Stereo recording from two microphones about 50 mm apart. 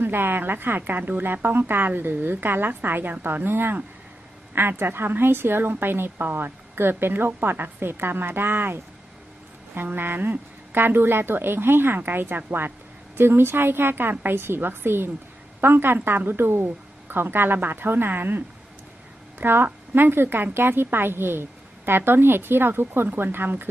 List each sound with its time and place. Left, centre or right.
0.0 s a woman's voice: right
4.8 s a woman's voice: right